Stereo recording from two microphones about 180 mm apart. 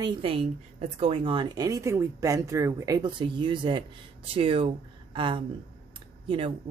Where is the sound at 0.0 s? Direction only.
25° right (ahead or behind).